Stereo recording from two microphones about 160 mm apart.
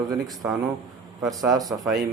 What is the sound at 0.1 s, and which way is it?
Speech, centre (ahead or behind).